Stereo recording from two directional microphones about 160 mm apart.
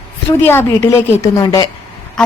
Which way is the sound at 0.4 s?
15° left (ahead or behind).